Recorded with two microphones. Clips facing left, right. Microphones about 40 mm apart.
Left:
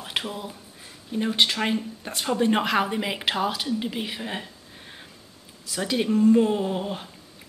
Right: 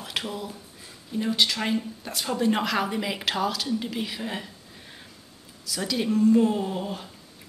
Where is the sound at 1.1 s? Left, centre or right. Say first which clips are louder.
Left 2 dB; left.